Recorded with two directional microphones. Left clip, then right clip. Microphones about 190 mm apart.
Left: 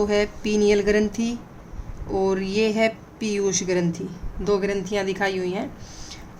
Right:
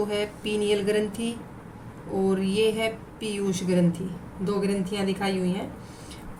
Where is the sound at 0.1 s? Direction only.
45° left (ahead or behind).